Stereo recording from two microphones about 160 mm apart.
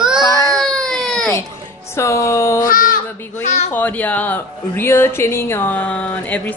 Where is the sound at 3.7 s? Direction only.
10° left (ahead or behind).